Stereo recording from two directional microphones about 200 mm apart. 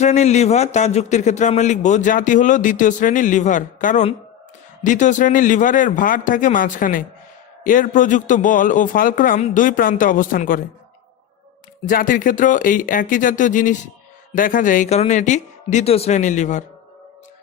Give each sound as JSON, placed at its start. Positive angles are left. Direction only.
{"t": 0.0, "sound": "a man's voice", "side_deg": 35}
{"t": 11.9, "sound": "a man's voice", "side_deg": 45}